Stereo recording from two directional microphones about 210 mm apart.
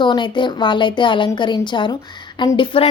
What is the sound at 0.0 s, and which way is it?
Speech, 20° left (ahead or behind).